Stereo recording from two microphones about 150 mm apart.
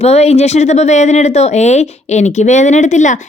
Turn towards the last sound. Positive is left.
turn(degrees=50)  # may be behind; listen again after turning